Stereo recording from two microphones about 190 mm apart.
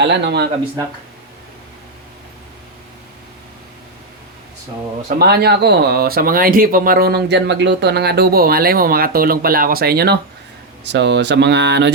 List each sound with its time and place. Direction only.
0.0 s speech: 65° right (ahead or behind)
5.0 s speech: 55° right (ahead or behind)
10.8 s speech: 65° right (ahead or behind)